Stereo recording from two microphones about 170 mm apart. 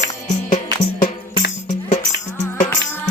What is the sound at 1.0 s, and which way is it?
Music, 50° left (ahead or behind).